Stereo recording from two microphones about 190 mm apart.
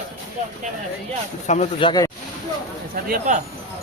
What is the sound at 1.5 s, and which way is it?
Speech, 35° left (ahead or behind).